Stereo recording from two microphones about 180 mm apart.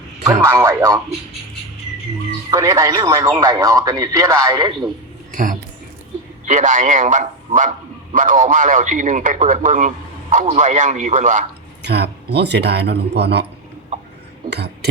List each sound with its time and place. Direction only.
0.4 s speech: 15° right (ahead or behind)
2.5 s a man's voice: 20° right (ahead or behind)
5.3 s a sound: 45° right (ahead or behind)
6.4 s a man's voice: 40° right (ahead or behind)
11.8 s speech: 65° right (ahead or behind)
14.5 s speech: 65° right (ahead or behind)